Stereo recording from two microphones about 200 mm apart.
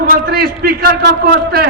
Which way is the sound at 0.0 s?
50° right (ahead or behind).